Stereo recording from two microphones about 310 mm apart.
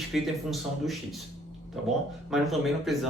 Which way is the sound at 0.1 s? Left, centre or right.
Centre.